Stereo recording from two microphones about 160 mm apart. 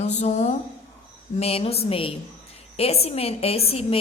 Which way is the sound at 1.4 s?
40° left (ahead or behind).